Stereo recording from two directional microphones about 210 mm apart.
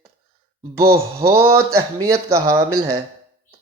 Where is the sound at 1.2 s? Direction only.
15° right (ahead or behind).